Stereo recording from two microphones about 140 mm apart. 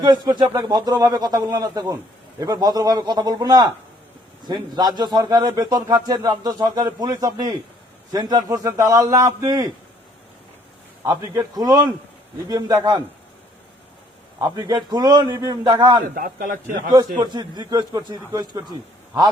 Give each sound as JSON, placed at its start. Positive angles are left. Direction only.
{"t": 0.0, "sound": "a man's voice", "side_deg": -30}
{"t": 11.0, "sound": "a man's voice", "side_deg": -25}
{"t": 14.3, "sound": "a man's voice", "side_deg": -25}
{"t": 16.1, "sound": "a man's voice", "side_deg": -90}
{"t": 17.2, "sound": "a man's voice", "side_deg": -30}